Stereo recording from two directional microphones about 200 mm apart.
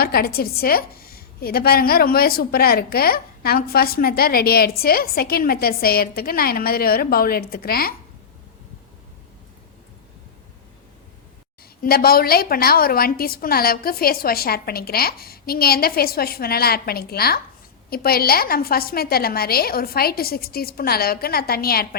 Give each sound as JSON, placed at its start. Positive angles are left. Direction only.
{"t": 0.0, "sound": "a woman's voice", "side_deg": 50}
{"t": 11.8, "sound": "a woman's voice", "side_deg": 50}